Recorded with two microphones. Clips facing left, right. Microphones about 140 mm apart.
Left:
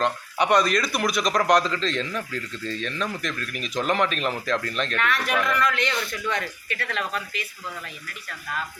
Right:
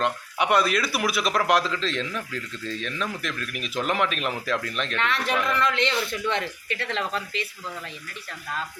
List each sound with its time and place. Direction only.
0.0 s speech: 5° right (ahead or behind)
4.9 s speech: 25° right (ahead or behind)